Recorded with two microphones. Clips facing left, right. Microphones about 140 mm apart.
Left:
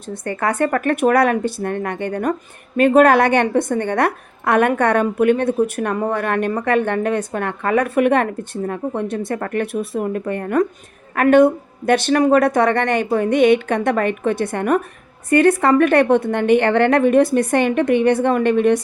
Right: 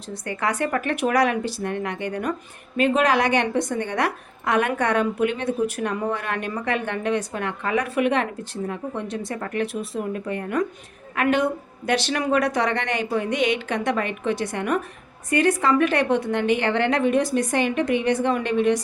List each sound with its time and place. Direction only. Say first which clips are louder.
0.1 s a woman's voice: left 5 dB; 50° left (ahead or behind)